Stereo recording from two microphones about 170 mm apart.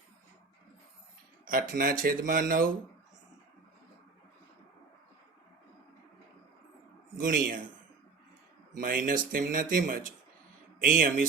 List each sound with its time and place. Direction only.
1.5 s speech: 60° right (ahead or behind)
7.2 s speech: 55° right (ahead or behind)
8.7 s speech: 55° right (ahead or behind)